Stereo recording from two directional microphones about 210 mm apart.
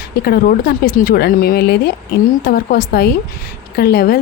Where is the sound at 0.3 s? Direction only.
45° left (ahead or behind).